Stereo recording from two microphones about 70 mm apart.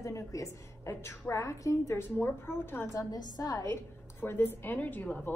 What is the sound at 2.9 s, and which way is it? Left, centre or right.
Speech, left.